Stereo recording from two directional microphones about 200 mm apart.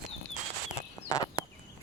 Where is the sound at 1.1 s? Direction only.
15° left (ahead or behind).